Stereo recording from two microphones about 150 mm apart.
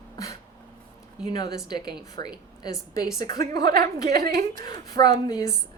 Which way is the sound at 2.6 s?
25° left (ahead or behind).